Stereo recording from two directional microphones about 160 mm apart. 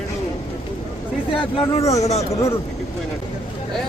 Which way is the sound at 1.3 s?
40° left (ahead or behind).